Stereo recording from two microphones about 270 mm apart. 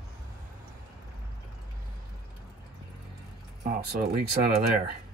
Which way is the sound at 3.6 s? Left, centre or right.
Right.